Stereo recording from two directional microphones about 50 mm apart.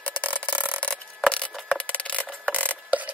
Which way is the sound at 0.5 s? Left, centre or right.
Right.